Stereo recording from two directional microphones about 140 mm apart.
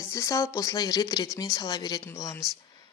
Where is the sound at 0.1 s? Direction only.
20° left (ahead or behind).